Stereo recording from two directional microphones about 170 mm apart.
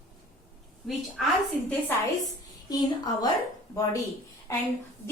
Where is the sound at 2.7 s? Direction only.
25° left (ahead or behind).